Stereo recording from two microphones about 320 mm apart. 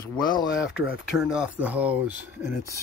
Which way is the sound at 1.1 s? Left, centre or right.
Centre.